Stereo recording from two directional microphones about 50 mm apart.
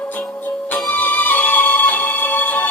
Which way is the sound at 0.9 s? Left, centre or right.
Left.